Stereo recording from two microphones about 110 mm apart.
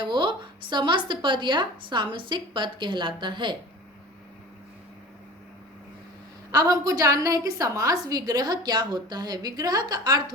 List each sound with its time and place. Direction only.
0.0 s speech: 45° right (ahead or behind)
6.5 s a woman's voice: 35° right (ahead or behind)